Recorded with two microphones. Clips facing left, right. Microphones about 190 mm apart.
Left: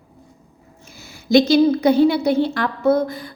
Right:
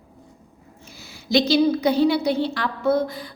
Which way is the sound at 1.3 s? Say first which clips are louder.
Left 5 dB; 50° left (ahead or behind).